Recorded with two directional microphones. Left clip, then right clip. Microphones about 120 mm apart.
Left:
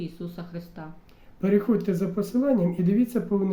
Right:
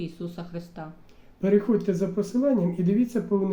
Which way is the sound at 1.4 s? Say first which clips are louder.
Right 1 dB; 35° left (ahead or behind).